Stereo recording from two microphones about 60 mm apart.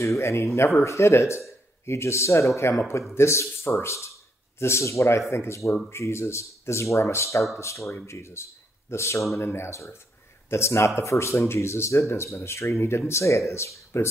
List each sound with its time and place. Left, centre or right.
0.0 s speech: left
7.9 s speech: left
9.4 s speech: left
9.7 s speech: left